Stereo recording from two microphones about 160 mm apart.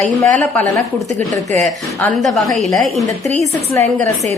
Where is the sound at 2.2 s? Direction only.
Centre (ahead or behind).